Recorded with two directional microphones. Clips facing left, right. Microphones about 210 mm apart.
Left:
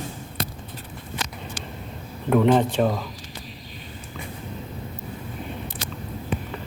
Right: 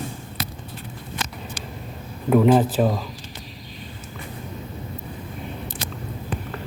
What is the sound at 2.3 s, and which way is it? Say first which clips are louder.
Speech: right 2 dB; 5° right (ahead or behind).